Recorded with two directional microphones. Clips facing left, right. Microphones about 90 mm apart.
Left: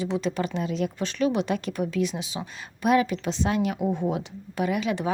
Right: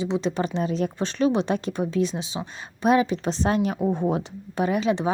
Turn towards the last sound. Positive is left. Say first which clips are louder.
# right 3 dB
turn(degrees=-30)  # may be behind; listen again after turning